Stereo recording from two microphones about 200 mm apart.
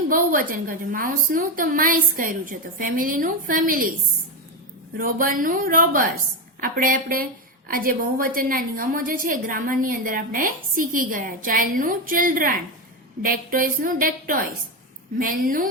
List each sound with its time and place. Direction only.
0.1 s a woman's voice: 45° right (ahead or behind)
4.9 s a woman's voice: 45° right (ahead or behind)